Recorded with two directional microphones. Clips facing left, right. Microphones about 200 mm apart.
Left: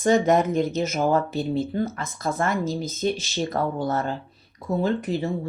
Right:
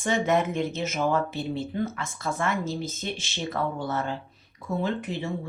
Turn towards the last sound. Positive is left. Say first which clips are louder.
# left 5 dB
turn(degrees=35)  # may be behind; listen again after turning